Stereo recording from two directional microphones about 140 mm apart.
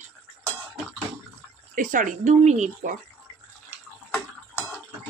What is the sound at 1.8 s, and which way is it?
Speech, 70° right (ahead or behind).